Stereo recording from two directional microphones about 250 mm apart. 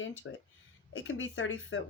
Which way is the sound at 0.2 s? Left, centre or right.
Left.